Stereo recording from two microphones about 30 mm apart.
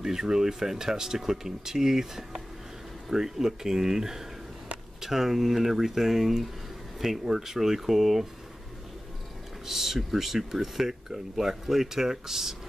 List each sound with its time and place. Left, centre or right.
0.0 s speech: centre
9.7 s speech: centre